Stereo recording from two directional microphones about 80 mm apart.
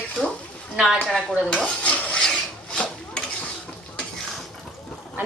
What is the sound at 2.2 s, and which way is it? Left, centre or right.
Filing, centre.